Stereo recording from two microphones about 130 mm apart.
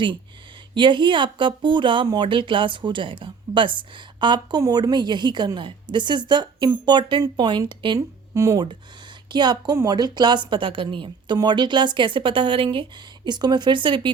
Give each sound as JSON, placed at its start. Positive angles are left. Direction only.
{"t": 0.7, "sound": "speech", "side_deg": -40}
{"t": 7.9, "sound": "speech", "side_deg": -25}